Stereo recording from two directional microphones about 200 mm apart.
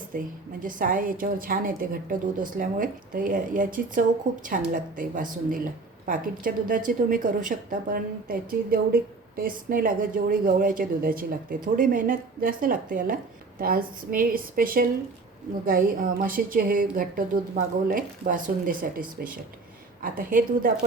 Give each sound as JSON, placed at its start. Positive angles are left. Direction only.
{"t": 0.1, "sound": "a woman's voice", "side_deg": -45}